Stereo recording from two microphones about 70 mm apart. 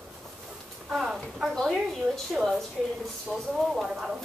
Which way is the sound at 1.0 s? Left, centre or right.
Centre.